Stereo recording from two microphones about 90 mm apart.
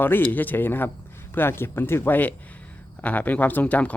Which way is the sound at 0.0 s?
20° left (ahead or behind).